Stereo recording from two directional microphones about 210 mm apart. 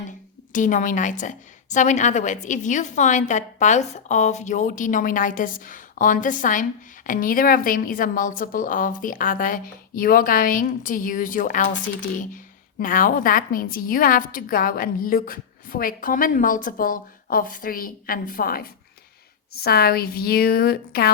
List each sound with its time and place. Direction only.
0.5 s a woman's voice: 40° left (ahead or behind)